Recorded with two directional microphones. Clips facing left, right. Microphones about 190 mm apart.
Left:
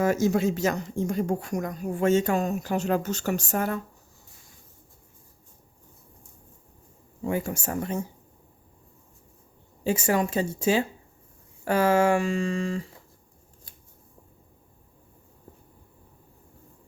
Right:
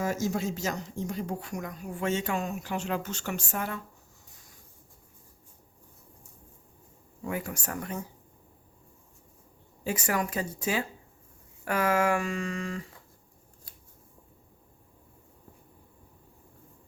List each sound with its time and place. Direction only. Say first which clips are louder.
0.0 s speech: left 7 dB; 65° left (ahead or behind); by 3.8 s 45° left (ahead or behind)
7.3 s speech: left 6 dB; 25° left (ahead or behind)
9.8 s speech: left 6 dB; 25° left (ahead or behind)